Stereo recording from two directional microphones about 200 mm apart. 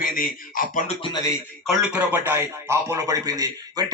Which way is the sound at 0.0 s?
45° left (ahead or behind).